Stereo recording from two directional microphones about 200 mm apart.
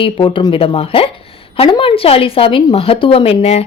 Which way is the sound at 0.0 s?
25° left (ahead or behind).